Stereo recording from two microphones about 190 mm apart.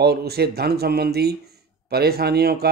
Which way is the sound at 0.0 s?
60° right (ahead or behind).